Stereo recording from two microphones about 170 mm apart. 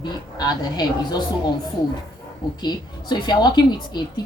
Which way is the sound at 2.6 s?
25° left (ahead or behind).